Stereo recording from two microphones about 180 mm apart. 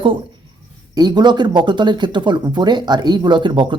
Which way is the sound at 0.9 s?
25° right (ahead or behind).